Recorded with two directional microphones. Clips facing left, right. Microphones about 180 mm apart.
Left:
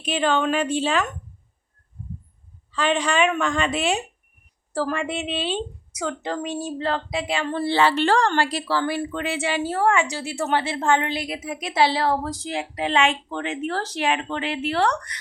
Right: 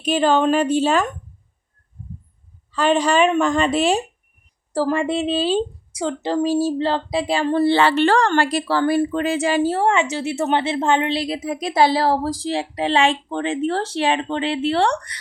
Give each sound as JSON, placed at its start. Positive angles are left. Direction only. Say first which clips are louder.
{"t": 0.0, "sound": "a woman's voice", "louder": "right 5 dB", "side_deg": -40}
{"t": 2.7, "sound": "a woman's voice", "louder": "right 5 dB", "side_deg": -40}
{"t": 7.7, "sound": "speech", "louder": "even", "side_deg": -65}
{"t": 9.7, "sound": "a woman's voice", "louder": "right 2 dB", "side_deg": -25}